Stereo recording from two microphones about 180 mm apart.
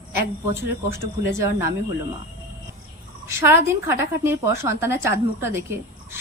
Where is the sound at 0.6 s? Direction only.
15° right (ahead or behind).